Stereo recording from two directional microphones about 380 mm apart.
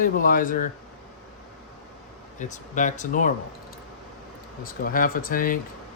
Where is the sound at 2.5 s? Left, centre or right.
Centre.